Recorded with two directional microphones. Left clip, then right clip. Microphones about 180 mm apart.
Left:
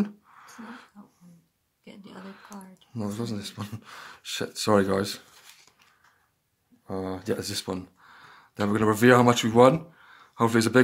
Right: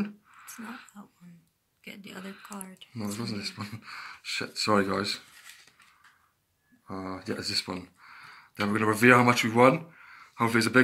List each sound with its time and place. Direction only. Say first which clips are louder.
0.0 s whispering: left 4 dB; 45° left (ahead or behind)
1.9 s a sound: right 3 dB; 10° right (ahead or behind)
2.9 s speech: left 3 dB; 45° left (ahead or behind)
6.9 s speech: left 5 dB; 40° left (ahead or behind)